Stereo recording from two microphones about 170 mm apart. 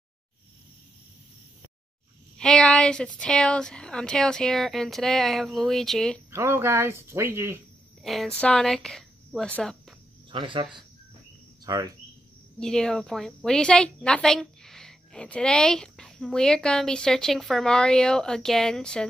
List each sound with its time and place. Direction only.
2.3 s a woman's voice: 5° left (ahead or behind)
6.3 s speech: 15° right (ahead or behind)
8.0 s speech: centre (ahead or behind)
10.3 s speech: 30° right (ahead or behind)
12.5 s a woman's voice: 5° left (ahead or behind)